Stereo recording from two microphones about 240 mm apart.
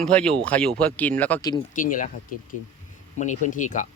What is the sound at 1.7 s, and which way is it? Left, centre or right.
Speech, left.